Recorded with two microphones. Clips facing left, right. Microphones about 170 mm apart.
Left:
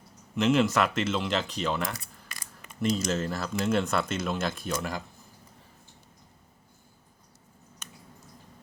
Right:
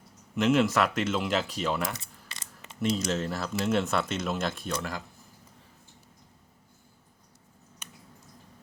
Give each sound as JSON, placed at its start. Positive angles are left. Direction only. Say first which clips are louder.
{"t": 0.3, "sound": "speech", "louder": "even", "side_deg": 0}
{"t": 2.0, "sound": "camera", "louder": "left 1 dB", "side_deg": -25}
{"t": 2.9, "sound": "speech", "louder": "left 1 dB", "side_deg": 0}
{"t": 4.8, "sound": "speech", "louder": "left 2 dB", "side_deg": 15}
{"t": 7.8, "sound": "a sound", "louder": "left 1 dB", "side_deg": -10}